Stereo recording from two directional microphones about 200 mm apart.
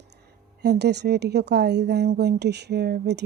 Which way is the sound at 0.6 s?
55° right (ahead or behind).